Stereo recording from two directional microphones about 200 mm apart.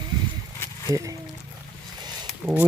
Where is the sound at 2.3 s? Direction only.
5° right (ahead or behind).